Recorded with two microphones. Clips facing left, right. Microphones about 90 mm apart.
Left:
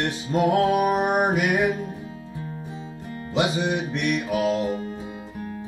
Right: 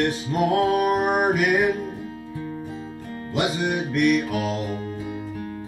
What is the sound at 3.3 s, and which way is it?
Music, 20° left (ahead or behind).